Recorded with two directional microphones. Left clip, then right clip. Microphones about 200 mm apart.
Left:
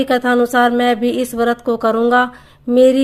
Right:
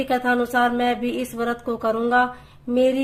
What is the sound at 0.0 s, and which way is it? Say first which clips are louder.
A woman's voice: left 7 dB; 40° left (ahead or behind).